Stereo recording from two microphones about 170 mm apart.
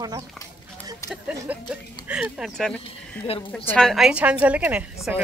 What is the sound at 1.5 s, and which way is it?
A woman's voice, 10° right (ahead or behind).